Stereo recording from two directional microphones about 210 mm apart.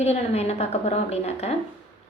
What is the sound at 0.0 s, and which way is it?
A woman's voice, 30° left (ahead or behind).